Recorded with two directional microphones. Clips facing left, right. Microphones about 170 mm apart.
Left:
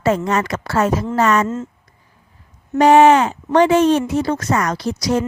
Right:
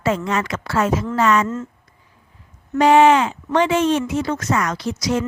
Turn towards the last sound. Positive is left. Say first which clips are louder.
# left 2 dB
turn(degrees=35)  # may be behind; listen again after turning